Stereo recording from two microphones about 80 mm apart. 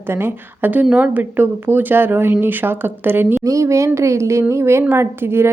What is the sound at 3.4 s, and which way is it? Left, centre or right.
A woman's voice, right.